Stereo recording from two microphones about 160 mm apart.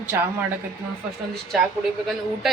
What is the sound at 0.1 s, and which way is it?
Speech, 15° right (ahead or behind).